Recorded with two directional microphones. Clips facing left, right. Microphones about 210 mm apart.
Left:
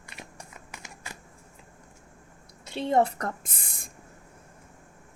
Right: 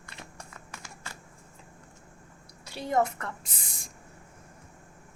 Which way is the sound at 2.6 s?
25° left (ahead or behind).